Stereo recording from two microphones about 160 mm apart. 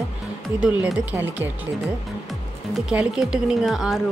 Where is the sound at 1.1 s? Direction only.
15° right (ahead or behind).